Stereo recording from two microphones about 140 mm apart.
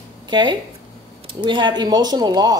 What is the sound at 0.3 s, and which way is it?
Speech, 35° right (ahead or behind).